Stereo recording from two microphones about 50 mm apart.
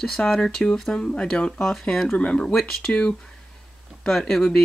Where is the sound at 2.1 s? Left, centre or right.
Left.